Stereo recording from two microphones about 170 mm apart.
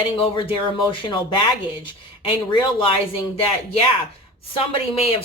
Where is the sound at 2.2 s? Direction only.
30° left (ahead or behind).